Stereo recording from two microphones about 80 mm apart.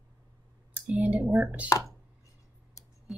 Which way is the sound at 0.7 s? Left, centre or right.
Centre.